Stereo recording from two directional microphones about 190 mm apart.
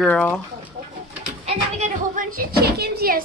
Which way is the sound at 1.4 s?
35° right (ahead or behind).